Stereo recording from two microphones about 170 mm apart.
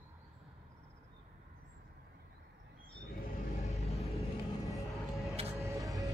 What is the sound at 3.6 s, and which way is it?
Vehicle, 40° left (ahead or behind).